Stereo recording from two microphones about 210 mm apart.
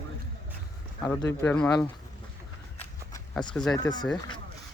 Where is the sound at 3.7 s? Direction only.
20° left (ahead or behind).